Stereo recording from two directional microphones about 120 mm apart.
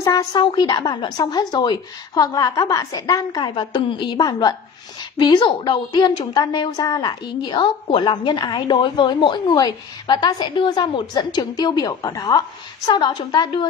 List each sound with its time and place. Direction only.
0.0 s a woman's voice: 30° left (ahead or behind)